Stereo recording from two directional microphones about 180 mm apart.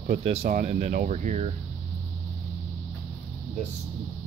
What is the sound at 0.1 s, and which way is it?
Speech, 35° right (ahead or behind).